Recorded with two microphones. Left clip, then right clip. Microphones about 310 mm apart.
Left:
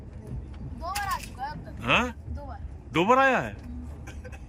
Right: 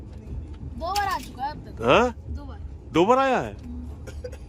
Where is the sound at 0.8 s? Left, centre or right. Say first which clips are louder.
Right 5 dB; right.